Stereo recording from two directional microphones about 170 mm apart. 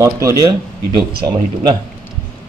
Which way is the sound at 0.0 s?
20° right (ahead or behind).